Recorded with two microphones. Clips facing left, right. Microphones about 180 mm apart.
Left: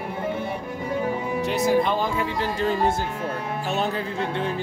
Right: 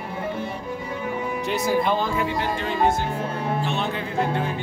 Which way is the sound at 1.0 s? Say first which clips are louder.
Left 3 dB; 35° left (ahead or behind).